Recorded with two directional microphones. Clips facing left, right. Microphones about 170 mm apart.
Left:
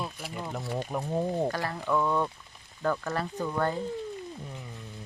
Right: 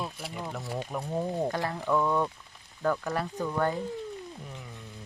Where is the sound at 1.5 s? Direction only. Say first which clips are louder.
Even; 20° right (ahead or behind).